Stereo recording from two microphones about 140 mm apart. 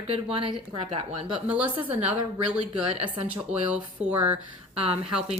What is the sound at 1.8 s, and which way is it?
Speech, 10° right (ahead or behind).